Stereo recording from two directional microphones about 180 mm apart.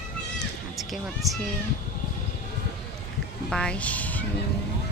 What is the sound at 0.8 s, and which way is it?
Speech, centre (ahead or behind).